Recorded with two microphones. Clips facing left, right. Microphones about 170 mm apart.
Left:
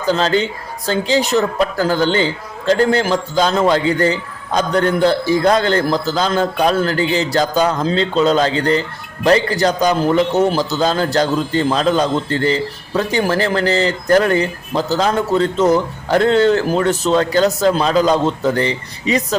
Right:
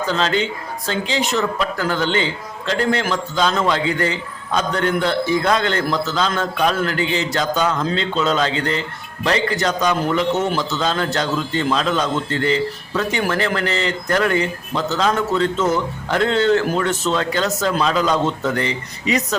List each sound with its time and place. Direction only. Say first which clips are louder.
0.1 s a man's voice: left 6 dB; 35° left (ahead or behind)